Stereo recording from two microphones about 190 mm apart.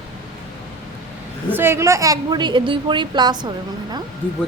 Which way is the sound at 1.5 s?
10° right (ahead or behind).